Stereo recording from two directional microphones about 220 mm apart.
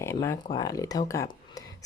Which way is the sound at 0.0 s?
15° left (ahead or behind).